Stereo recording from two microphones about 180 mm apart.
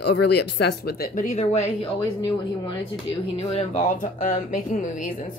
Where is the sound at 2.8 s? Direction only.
30° left (ahead or behind).